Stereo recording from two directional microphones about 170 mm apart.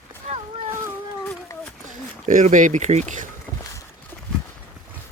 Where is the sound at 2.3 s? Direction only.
50° right (ahead or behind).